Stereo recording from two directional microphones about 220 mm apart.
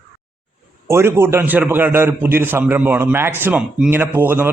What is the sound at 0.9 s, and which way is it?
A man's voice, 10° right (ahead or behind).